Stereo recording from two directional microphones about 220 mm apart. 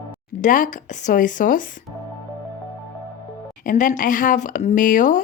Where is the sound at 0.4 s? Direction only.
35° left (ahead or behind).